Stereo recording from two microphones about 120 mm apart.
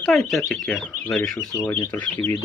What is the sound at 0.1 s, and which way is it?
Speech, centre (ahead or behind).